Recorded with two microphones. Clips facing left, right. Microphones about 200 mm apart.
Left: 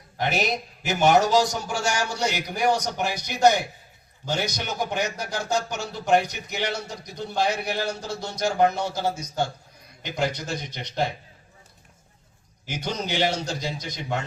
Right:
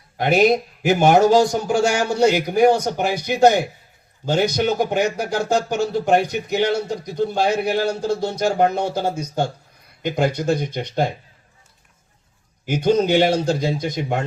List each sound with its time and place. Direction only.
0.2 s a man's voice: 55° right (ahead or behind)
12.6 s a man's voice: 55° right (ahead or behind)